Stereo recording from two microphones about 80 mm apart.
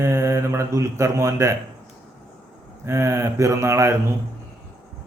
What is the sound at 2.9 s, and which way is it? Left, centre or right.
A man's voice, right.